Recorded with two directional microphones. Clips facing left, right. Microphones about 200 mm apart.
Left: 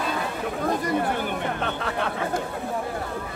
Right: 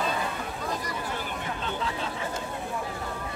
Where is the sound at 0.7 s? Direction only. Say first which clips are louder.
Left 10 dB; 55° left (ahead or behind).